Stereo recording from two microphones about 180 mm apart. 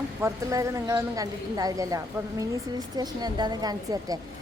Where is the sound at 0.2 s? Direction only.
15° right (ahead or behind).